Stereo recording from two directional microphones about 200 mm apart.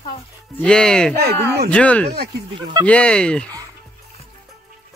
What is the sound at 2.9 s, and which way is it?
Speech, 5° left (ahead or behind).